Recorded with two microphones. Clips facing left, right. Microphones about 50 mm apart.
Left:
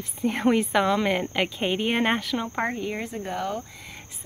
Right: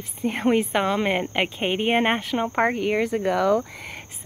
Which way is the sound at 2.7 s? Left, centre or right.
Right.